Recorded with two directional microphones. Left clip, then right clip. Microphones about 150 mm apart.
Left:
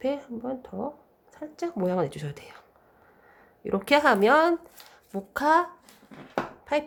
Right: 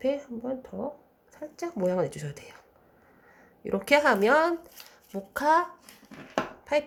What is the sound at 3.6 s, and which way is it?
A woman's voice, 20° left (ahead or behind).